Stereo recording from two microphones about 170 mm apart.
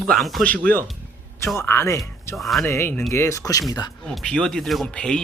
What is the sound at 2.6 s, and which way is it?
Speech, 15° left (ahead or behind).